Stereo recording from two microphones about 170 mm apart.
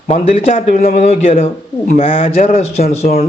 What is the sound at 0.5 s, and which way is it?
Speech, 50° left (ahead or behind).